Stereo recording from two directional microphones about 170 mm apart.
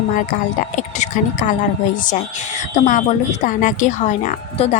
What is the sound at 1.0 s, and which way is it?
Speech, 45° left (ahead or behind).